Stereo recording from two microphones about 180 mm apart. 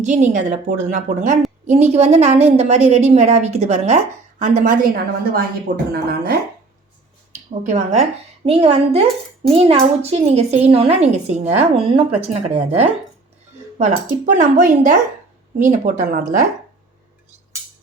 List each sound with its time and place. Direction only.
0.0 s a woman's voice: 40° right (ahead or behind); by 6.4 s 60° right (ahead or behind)
7.6 s a woman's voice: 40° right (ahead or behind)
14.3 s a woman's voice: 45° right (ahead or behind)